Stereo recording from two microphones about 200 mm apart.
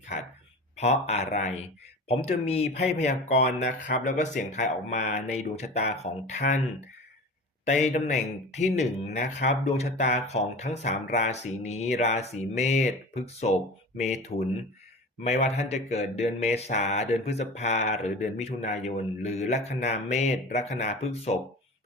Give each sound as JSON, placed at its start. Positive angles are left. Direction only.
{"t": 0.8, "sound": "speech", "side_deg": 35}
{"t": 7.6, "sound": "speech", "side_deg": 35}